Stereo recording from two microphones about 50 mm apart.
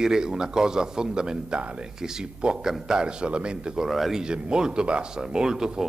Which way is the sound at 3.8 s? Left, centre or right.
Centre.